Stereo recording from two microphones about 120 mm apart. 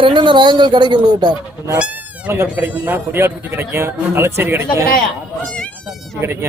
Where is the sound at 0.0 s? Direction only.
40° right (ahead or behind).